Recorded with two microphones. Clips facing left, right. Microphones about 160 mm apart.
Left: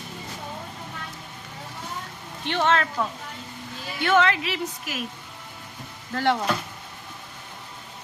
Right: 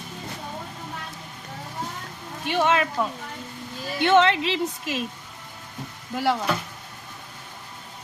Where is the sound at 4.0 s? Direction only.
25° right (ahead or behind).